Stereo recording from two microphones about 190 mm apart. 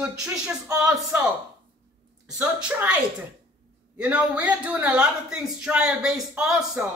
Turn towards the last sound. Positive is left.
turn(degrees=0)  # may be behind; listen again after turning